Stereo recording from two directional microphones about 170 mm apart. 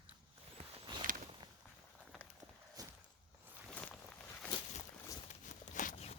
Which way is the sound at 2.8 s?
20° right (ahead or behind).